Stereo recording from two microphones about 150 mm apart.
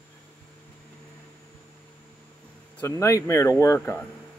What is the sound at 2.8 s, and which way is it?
Speech, 20° left (ahead or behind).